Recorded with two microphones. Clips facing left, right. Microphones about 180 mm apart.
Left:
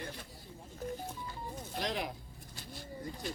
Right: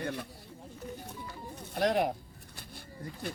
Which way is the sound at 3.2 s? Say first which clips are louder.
Right 3 dB; 55° right (ahead or behind).